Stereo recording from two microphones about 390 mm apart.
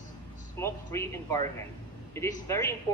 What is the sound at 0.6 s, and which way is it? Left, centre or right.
Speech, centre.